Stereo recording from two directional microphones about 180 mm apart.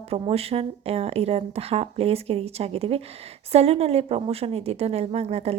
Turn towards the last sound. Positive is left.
turn(degrees=-35)  # may be behind; listen again after turning